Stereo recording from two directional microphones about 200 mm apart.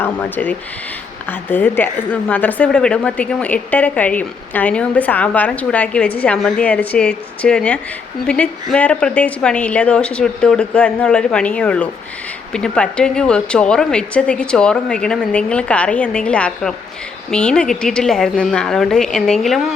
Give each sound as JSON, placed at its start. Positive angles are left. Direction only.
{"t": 0.0, "sound": "a woman's voice", "side_deg": 10}